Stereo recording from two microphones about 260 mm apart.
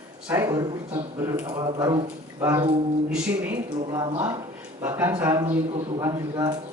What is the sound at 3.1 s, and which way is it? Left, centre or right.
Speech, centre.